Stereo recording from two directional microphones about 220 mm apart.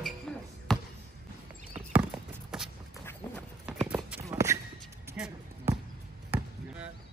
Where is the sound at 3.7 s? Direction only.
5° right (ahead or behind).